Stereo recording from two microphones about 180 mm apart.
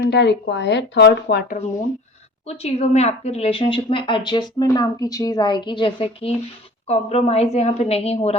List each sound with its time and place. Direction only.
0.1 s speech: 70° left (ahead or behind)
2.5 s a woman's voice: 35° left (ahead or behind)